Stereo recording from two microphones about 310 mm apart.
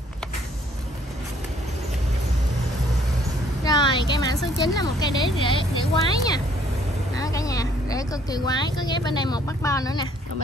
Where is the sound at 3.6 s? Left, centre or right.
Centre.